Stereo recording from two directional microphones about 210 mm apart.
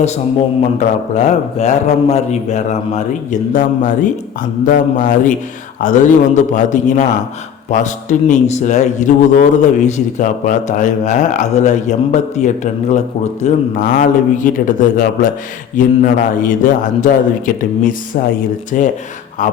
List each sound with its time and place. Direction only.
0.8 s a man's voice: 35° left (ahead or behind)